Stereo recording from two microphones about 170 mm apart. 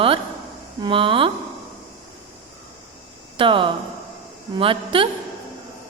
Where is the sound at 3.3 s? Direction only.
30° right (ahead or behind).